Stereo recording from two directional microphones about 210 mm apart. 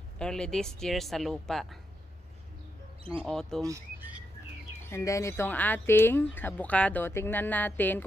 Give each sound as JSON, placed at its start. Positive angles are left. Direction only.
{"t": 0.2, "sound": "speech", "side_deg": 5}
{"t": 3.0, "sound": "speech", "side_deg": -25}
{"t": 3.3, "sound": "speech", "side_deg": 0}
{"t": 3.6, "sound": "speech", "side_deg": -10}
{"t": 4.8, "sound": "speech", "side_deg": 15}